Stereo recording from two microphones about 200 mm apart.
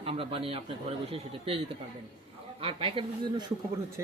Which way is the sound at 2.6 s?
25° right (ahead or behind).